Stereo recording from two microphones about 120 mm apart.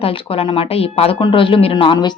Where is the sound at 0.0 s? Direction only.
50° left (ahead or behind).